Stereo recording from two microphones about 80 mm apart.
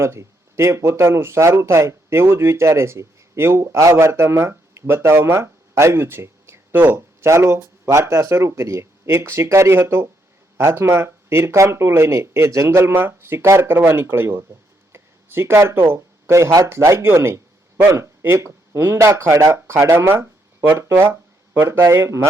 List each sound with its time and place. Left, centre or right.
0.0 s speech: right